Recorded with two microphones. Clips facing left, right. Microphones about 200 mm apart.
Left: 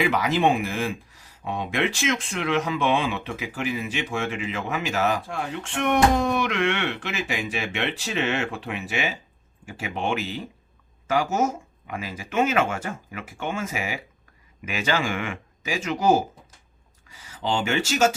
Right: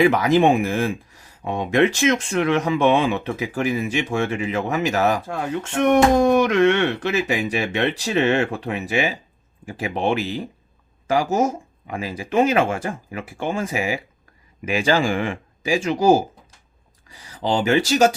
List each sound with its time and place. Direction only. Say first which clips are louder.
0.0 s speech: right 6 dB; 45° right (ahead or behind)